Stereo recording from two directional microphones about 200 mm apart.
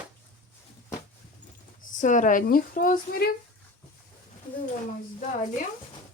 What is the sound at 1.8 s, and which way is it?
Speech, 40° left (ahead or behind).